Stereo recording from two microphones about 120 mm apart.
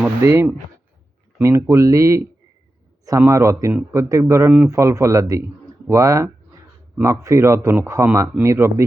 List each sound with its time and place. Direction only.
0.2 s a man's voice: 20° right (ahead or behind)